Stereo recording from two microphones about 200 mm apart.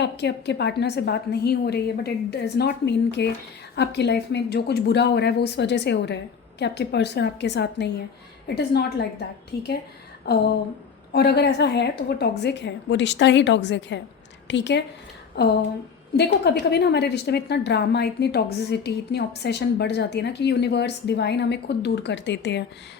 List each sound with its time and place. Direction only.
0.0 s a woman's voice: 60° left (ahead or behind)